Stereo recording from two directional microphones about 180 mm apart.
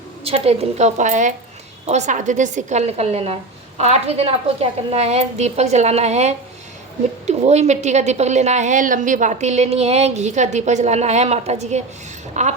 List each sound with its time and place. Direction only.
0.3 s a woman's voice: 35° right (ahead or behind)